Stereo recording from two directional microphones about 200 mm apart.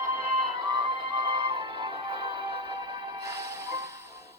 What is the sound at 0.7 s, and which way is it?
Music, 25° right (ahead or behind).